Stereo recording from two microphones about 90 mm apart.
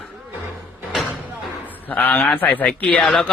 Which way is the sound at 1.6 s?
20° left (ahead or behind).